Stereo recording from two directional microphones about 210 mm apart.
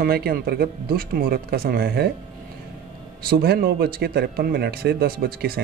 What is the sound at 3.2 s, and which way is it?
Speech, 45° right (ahead or behind).